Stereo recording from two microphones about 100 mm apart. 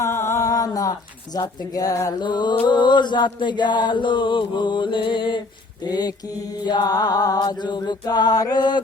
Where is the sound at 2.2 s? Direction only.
50° left (ahead or behind).